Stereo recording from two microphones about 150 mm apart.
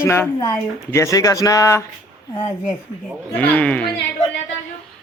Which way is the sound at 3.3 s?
10° left (ahead or behind).